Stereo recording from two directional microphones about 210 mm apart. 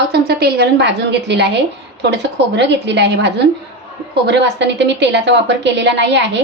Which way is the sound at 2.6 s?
55° right (ahead or behind).